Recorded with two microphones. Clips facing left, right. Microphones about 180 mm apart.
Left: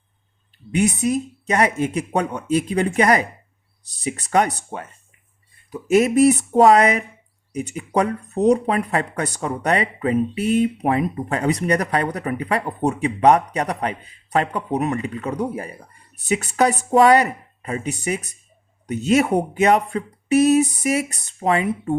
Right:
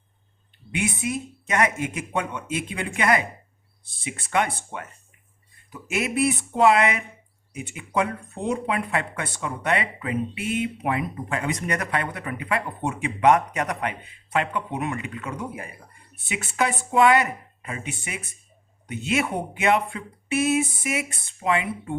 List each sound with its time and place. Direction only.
0.7 s speech: 40° left (ahead or behind)